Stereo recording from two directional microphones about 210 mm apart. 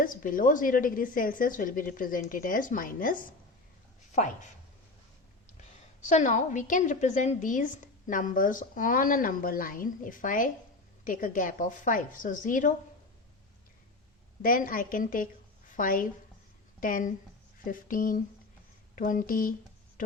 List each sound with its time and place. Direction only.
0.0 s a woman's voice: 40° left (ahead or behind)
6.1 s a woman's voice: 35° left (ahead or behind)
14.4 s a woman's voice: 40° left (ahead or behind)